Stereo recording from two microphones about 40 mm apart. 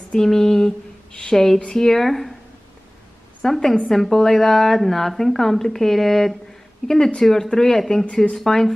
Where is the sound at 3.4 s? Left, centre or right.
Centre.